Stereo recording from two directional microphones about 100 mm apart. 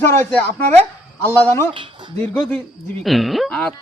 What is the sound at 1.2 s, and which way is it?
Speech, 20° left (ahead or behind).